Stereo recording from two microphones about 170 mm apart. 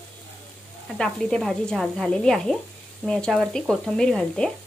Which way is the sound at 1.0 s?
5° left (ahead or behind).